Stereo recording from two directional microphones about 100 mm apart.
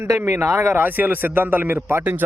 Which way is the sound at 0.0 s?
25° right (ahead or behind).